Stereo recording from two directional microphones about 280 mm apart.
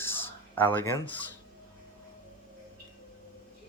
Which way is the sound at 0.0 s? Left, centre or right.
Centre.